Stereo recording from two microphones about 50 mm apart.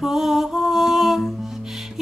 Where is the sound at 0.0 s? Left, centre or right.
Centre.